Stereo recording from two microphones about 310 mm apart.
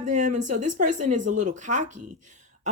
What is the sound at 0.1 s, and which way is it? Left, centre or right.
A woman's voice, right.